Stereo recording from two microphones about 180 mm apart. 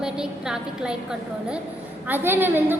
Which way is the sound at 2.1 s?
10° right (ahead or behind).